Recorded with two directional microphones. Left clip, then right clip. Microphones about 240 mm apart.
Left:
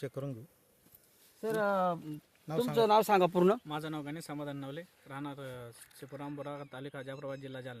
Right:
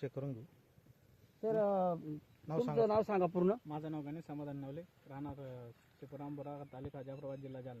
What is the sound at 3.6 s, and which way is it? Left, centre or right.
Speech, centre.